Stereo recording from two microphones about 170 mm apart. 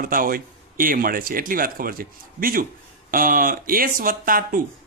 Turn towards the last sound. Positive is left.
turn(degrees=-55)  # may be behind; listen again after turning